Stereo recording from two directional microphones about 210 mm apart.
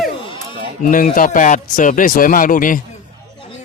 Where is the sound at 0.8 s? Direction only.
40° left (ahead or behind).